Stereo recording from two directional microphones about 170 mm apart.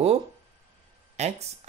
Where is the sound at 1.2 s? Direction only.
40° right (ahead or behind).